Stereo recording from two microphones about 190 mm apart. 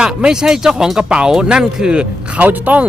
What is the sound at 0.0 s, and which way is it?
Speech, 5° right (ahead or behind).